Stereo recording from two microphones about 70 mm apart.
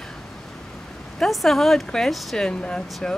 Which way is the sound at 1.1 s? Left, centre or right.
Centre.